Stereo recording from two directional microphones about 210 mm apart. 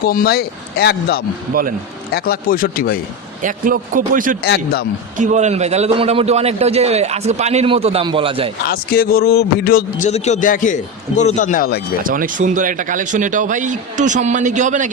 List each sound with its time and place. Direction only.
0.0 s a man's voice: 45° left (ahead or behind)
3.4 s a man's voice: 40° right (ahead or behind)
4.4 s a man's voice: 50° left (ahead or behind)
5.1 s a man's voice: 35° right (ahead or behind)
8.6 s a man's voice: 45° left (ahead or behind)
10.1 s speech: 30° left (ahead or behind)
12.0 s a man's voice: 40° right (ahead or behind)